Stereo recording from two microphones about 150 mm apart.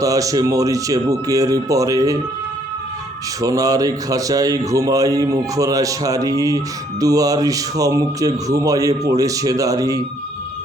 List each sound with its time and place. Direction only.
0.0 s a man's voice: 25° right (ahead or behind)
3.4 s a man's voice: 25° right (ahead or behind)